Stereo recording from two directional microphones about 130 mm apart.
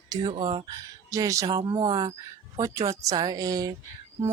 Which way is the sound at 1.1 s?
25° right (ahead or behind).